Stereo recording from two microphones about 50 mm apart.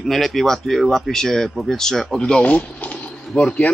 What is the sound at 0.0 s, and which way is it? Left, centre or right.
Speech, centre.